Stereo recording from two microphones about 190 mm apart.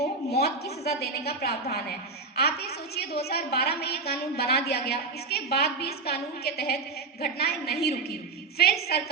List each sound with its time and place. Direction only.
0.0 s a woman's voice: 60° left (ahead or behind)